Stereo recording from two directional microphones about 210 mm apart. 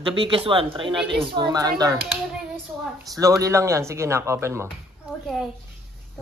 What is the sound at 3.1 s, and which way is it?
A man's voice, 15° right (ahead or behind).